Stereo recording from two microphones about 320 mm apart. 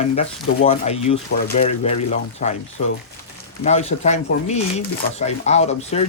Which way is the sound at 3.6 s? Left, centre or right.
Left.